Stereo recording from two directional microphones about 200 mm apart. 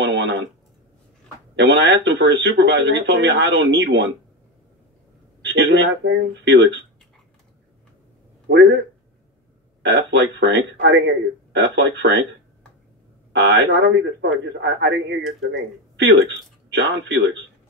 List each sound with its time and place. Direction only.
0.0 s a sound: 60° right (ahead or behind)
1.6 s speech: 60° right (ahead or behind)
5.4 s speech: 60° right (ahead or behind)
8.5 s speech: 60° right (ahead or behind)
9.8 s speech: 60° right (ahead or behind)
13.3 s speech: 60° right (ahead or behind)